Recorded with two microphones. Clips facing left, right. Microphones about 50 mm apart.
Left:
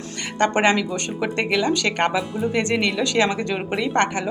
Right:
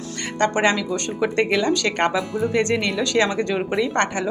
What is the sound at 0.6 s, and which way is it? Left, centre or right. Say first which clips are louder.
Speech: left 1 dB; centre.